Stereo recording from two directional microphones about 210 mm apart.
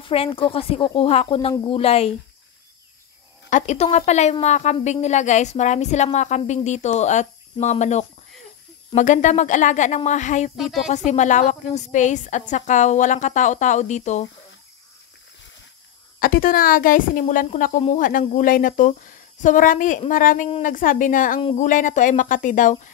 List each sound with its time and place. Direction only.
0.0 s speech: 25° left (ahead or behind)
3.4 s speech: 35° left (ahead or behind)
10.5 s speech: centre (ahead or behind)
11.1 s speech: 35° left (ahead or behind)
16.2 s speech: 45° left (ahead or behind)
21.4 s speech: 25° left (ahead or behind)
21.6 s speech: 40° left (ahead or behind)